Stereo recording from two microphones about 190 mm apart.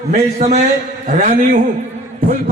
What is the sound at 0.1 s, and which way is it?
A man's voice, 35° right (ahead or behind).